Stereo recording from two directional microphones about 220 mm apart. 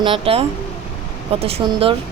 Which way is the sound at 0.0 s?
25° right (ahead or behind).